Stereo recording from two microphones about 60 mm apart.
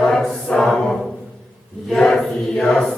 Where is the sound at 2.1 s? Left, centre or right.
Centre.